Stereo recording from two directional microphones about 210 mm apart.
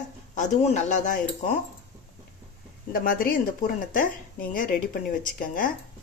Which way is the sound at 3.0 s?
45° left (ahead or behind).